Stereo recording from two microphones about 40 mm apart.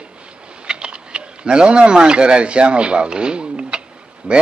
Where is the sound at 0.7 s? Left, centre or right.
Right.